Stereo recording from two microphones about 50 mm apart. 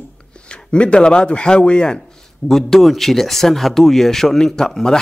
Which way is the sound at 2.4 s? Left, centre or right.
Centre.